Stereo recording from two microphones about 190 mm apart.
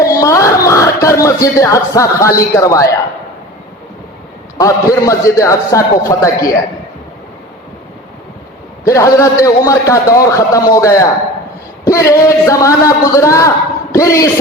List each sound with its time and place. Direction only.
0.0 s speech: 15° left (ahead or behind)
4.5 s a man's voice: 15° left (ahead or behind)
8.9 s a man's voice: 15° left (ahead or behind)